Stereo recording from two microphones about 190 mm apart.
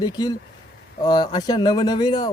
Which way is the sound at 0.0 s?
20° left (ahead or behind).